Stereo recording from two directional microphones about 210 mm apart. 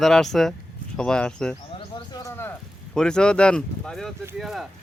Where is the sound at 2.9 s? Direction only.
5° left (ahead or behind).